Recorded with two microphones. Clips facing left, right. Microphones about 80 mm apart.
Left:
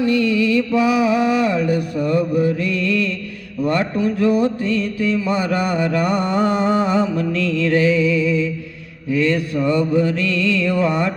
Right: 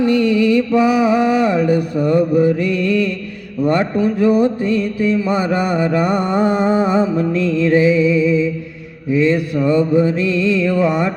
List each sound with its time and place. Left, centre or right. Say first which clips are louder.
0.1 s music: right 3 dB; right
3.7 s mantra: right 3 dB; right